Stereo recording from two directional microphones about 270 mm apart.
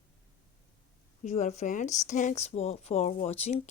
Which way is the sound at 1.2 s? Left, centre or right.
Left.